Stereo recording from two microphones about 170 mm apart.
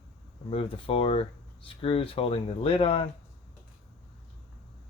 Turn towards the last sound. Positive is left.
turn(degrees=35)  # may be behind; listen again after turning